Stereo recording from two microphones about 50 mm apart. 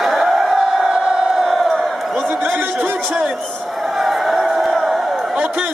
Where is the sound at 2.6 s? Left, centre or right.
Right.